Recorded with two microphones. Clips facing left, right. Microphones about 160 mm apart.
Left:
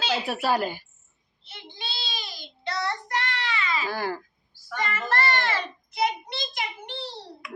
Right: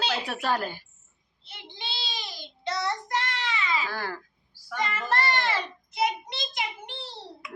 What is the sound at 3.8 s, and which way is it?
Speech, 15° left (ahead or behind).